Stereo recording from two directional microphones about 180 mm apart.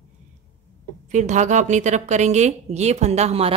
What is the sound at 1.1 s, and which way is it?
A woman's voice, 40° right (ahead or behind).